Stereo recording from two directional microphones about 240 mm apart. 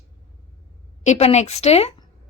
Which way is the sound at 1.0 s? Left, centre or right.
Left.